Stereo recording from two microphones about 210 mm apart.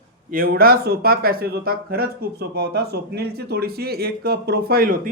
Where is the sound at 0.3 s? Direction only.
45° right (ahead or behind).